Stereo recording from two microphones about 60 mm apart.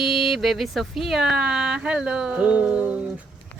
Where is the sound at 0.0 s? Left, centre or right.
Centre; by 3.0 s right.